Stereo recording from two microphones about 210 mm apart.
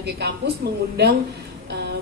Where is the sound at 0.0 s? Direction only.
50° right (ahead or behind).